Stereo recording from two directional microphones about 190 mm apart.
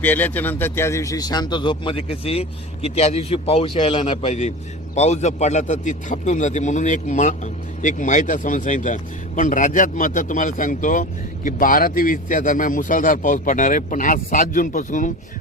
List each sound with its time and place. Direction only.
0.0 s a man's voice: 10° left (ahead or behind); by 15.1 s 45° left (ahead or behind)